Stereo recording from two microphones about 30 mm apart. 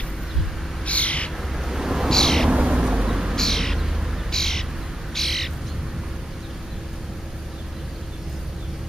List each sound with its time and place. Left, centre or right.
0.8 s owl: left
1.5 s a sound: centre
2.0 s cat: centre
2.7 s vehicle: right
3.1 s a sound: centre
3.3 s music: centre
4.3 s bird: centre